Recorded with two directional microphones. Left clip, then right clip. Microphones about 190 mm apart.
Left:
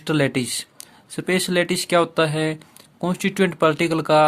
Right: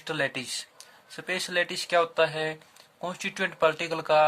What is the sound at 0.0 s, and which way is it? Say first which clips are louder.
Speech: left 8 dB; 40° left (ahead or behind).